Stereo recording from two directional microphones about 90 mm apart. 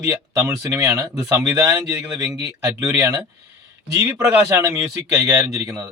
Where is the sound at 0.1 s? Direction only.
35° right (ahead or behind).